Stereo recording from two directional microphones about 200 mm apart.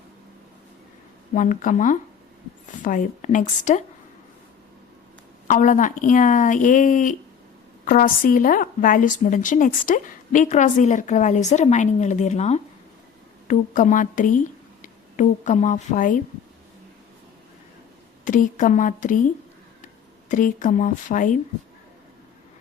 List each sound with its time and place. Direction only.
1.3 s a woman's voice: 40° left (ahead or behind)
5.5 s a woman's voice: 40° left (ahead or behind)
18.3 s a woman's voice: 40° left (ahead or behind)